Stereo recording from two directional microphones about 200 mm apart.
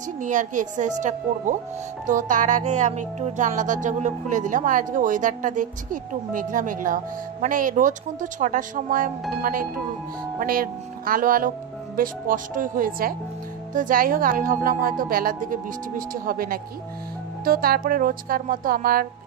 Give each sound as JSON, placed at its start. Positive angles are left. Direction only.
{"t": 0.2, "sound": "music", "side_deg": -40}
{"t": 9.4, "sound": "a woman's voice", "side_deg": -45}